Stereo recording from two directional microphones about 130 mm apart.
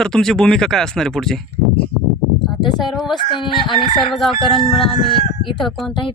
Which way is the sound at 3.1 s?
40° left (ahead or behind).